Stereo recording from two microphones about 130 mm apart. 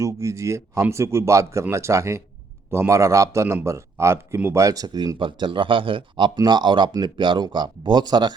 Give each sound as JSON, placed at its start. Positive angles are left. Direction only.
{"t": 0.0, "sound": "speech", "side_deg": -25}